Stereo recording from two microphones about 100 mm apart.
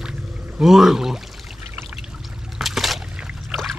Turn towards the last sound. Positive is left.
turn(degrees=-5)  # may be behind; listen again after turning